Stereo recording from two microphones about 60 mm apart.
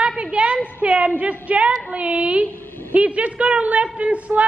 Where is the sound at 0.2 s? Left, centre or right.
Centre.